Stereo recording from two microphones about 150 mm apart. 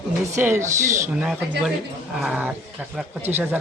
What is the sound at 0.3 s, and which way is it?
Speech, 15° right (ahead or behind).